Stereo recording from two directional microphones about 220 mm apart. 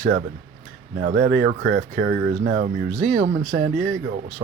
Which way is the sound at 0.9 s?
50° right (ahead or behind).